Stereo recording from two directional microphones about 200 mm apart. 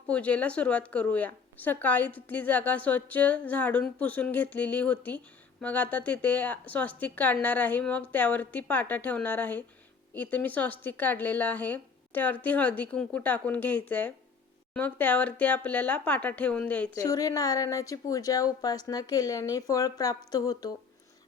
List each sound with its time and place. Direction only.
0.1 s a woman's voice: 5° left (ahead or behind)